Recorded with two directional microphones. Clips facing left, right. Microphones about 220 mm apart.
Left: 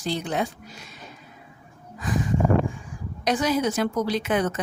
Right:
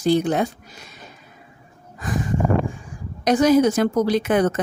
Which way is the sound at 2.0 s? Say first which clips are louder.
Right 1 dB; 50° right (ahead or behind).